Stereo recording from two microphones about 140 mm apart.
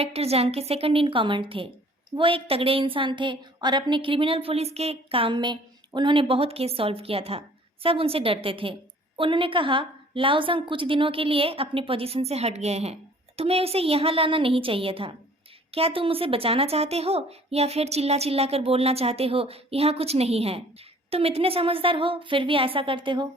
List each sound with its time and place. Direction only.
0.0 s a woman's voice: 45° right (ahead or behind)